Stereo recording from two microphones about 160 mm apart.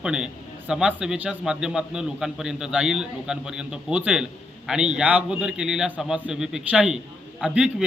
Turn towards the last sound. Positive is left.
turn(degrees=-5)  # may be behind; listen again after turning